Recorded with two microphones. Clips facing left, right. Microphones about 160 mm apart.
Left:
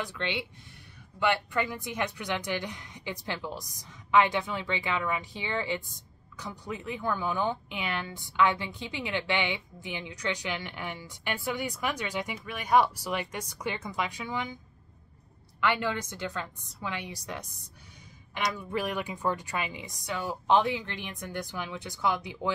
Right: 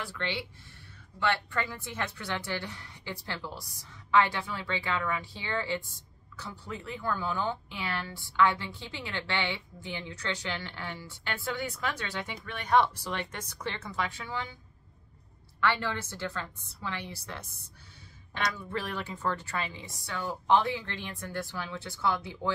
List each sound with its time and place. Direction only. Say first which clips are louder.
0.0 s speech: left 2 dB; 20° left (ahead or behind)
15.6 s speech: left 1 dB; 15° left (ahead or behind)